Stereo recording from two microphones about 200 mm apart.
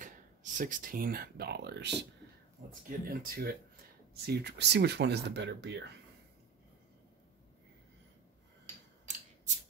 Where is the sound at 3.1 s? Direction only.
50° right (ahead or behind).